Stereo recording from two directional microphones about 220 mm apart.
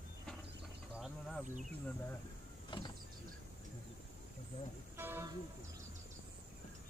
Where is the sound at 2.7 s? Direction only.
25° left (ahead or behind).